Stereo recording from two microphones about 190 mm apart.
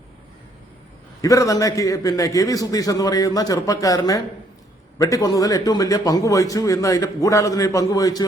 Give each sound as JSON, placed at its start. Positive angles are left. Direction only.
{"t": 1.2, "sound": "a man's voice", "side_deg": 15}